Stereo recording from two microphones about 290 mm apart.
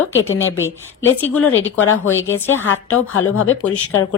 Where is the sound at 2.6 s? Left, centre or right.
Left.